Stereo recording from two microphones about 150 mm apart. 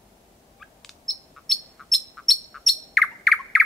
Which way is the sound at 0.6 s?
Centre (ahead or behind).